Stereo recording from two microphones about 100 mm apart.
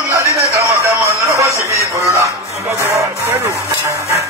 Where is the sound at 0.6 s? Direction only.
30° right (ahead or behind).